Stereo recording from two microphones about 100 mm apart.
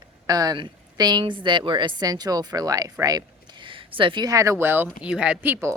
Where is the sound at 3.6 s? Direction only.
60° right (ahead or behind).